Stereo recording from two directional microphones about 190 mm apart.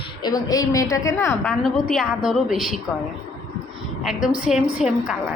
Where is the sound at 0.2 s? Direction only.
20° left (ahead or behind).